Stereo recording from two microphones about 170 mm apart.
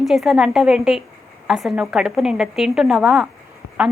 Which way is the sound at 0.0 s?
Centre (ahead or behind).